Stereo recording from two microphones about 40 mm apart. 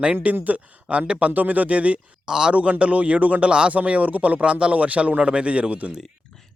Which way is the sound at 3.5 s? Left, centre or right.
Right.